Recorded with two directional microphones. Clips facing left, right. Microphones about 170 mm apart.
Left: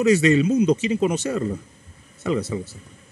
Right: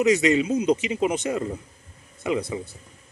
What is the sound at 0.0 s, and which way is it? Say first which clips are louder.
Speech: left 3 dB; 20° right (ahead or behind).